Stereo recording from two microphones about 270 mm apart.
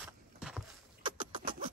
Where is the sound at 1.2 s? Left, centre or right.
Centre.